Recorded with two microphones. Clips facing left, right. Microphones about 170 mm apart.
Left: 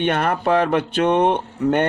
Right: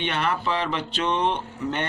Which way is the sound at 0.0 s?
50° left (ahead or behind).